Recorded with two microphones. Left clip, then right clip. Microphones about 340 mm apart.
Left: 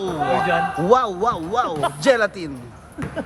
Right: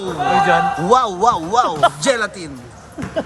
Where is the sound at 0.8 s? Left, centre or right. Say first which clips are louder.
Right 1 dB; centre.